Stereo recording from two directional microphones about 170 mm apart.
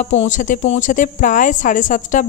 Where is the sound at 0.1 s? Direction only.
40° left (ahead or behind).